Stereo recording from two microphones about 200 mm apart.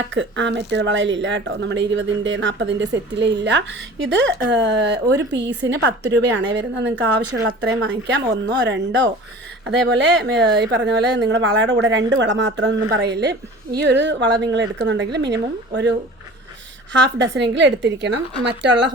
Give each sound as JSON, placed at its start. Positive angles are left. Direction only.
{"t": 0.1, "sound": "speech", "side_deg": -65}